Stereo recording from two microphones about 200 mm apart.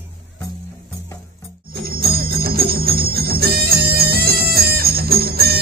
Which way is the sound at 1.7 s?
50° right (ahead or behind).